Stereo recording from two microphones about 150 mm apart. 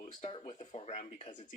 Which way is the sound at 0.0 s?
55° left (ahead or behind).